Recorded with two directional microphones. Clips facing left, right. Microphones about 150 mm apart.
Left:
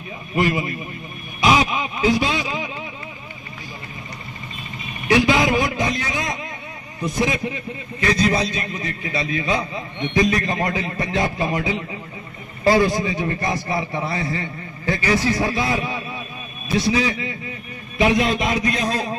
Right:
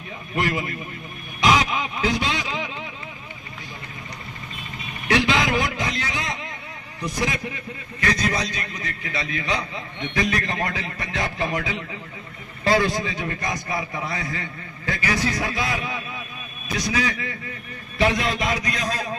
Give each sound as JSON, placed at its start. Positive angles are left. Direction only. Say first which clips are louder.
{"t": 0.4, "sound": "a man's voice", "louder": "left 4 dB", "side_deg": 20}
{"t": 5.0, "sound": "a man's voice", "louder": "left 4 dB", "side_deg": 20}